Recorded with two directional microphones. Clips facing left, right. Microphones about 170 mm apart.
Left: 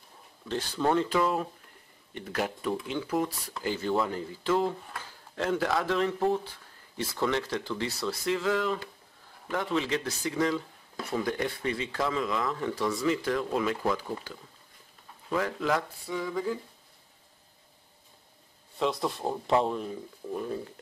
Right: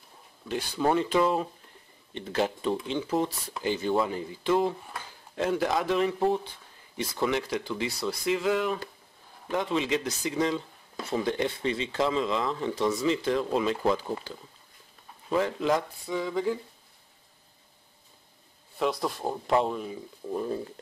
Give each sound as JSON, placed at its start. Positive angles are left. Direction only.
{"t": 0.5, "sound": "speech", "side_deg": -15}
{"t": 18.8, "sound": "speech", "side_deg": 0}